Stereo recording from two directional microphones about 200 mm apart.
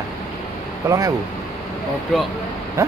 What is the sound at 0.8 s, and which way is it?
Speech, 15° right (ahead or behind).